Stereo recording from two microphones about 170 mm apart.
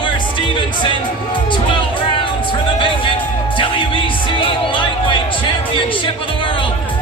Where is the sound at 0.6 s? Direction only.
30° left (ahead or behind).